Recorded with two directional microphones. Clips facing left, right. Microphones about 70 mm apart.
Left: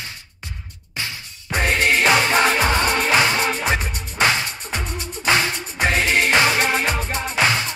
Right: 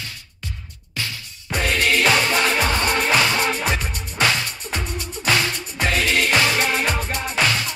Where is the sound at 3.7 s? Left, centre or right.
Left.